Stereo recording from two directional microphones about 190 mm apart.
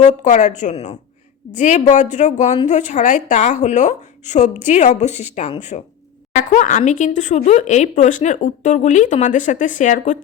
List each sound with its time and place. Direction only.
0.0 s speech: 40° left (ahead or behind)